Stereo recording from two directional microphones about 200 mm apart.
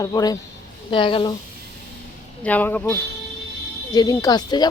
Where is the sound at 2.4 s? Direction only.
10° left (ahead or behind).